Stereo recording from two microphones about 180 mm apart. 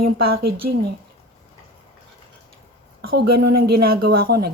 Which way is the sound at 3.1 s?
60° right (ahead or behind).